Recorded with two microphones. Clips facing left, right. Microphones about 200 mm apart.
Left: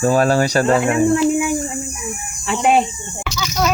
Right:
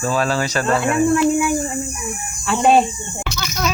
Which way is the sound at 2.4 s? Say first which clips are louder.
Right 1 dB; 15° left (ahead or behind).